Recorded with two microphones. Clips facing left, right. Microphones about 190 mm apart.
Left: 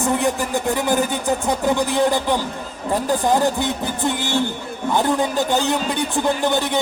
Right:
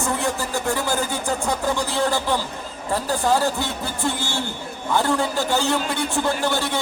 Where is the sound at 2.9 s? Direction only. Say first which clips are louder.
Left 3 dB; 15° left (ahead or behind).